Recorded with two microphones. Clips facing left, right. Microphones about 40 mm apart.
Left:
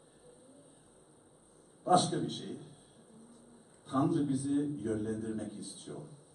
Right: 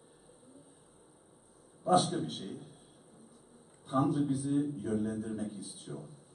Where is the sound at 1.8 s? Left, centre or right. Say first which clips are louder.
Even; centre.